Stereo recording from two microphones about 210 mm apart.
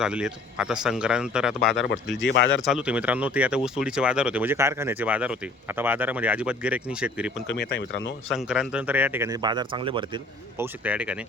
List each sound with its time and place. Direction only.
0.0 s a man's voice: 5° right (ahead or behind)
2.2 s speech: 60° left (ahead or behind)
2.6 s speech: 5° right (ahead or behind)
7.5 s speech: 55° left (ahead or behind)
8.3 s speech: 5° right (ahead or behind); by 10.2 s 25° right (ahead or behind)
10.6 s a man's voice: 5° right (ahead or behind)